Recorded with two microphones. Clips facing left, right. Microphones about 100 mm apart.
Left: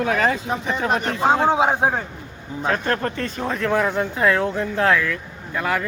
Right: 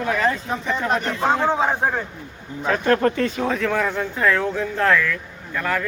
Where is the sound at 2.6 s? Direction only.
35° left (ahead or behind).